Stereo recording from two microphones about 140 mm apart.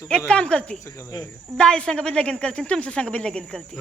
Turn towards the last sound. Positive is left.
turn(degrees=5)  # may be behind; listen again after turning